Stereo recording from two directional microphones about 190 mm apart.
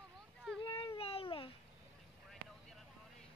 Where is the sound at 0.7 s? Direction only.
25° left (ahead or behind).